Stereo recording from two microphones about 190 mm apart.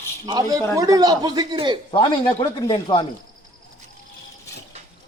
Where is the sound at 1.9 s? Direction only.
20° left (ahead or behind).